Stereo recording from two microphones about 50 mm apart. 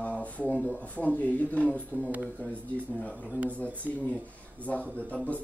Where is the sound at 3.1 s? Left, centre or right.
Right.